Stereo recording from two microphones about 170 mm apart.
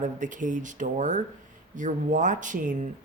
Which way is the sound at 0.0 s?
50° right (ahead or behind).